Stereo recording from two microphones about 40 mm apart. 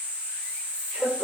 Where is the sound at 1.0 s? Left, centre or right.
Right.